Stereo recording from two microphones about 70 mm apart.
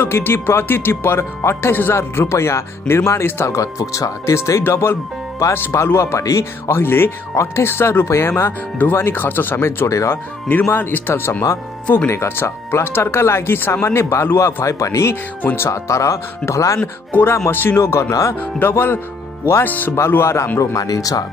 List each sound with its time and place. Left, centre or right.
0.0 s speech: left
9.8 s speech: left
10.5 s speech: left
16.8 s speech: left
17.7 s speech: left
18.4 s speech: left
20.1 s speech: left
20.5 s speech: left